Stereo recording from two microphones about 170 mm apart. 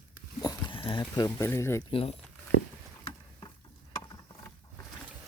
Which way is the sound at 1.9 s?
35° left (ahead or behind).